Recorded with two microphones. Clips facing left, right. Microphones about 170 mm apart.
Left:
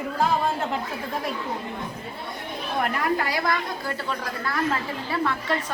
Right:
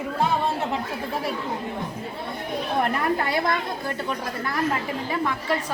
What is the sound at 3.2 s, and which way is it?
A woman's voice, 25° right (ahead or behind).